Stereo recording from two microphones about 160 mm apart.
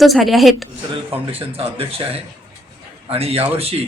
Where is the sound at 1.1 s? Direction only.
35° right (ahead or behind).